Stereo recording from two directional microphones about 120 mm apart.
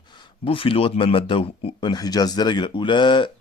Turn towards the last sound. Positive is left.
turn(degrees=40)  # may be behind; listen again after turning